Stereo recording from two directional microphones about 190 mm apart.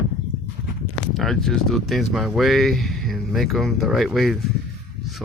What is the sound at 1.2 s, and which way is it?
Speech, centre (ahead or behind).